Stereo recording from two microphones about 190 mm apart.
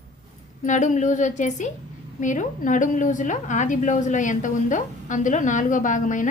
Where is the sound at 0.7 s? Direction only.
40° left (ahead or behind).